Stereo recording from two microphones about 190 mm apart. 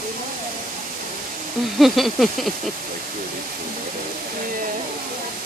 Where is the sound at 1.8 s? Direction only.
Centre (ahead or behind).